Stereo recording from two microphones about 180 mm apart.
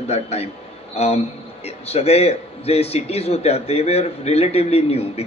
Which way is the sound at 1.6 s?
35° left (ahead or behind).